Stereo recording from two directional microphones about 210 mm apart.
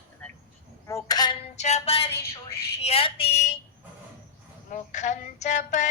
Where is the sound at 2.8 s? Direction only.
30° left (ahead or behind).